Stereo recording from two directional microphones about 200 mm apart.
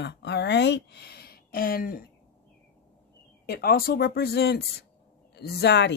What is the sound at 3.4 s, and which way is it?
Speech, 50° left (ahead or behind).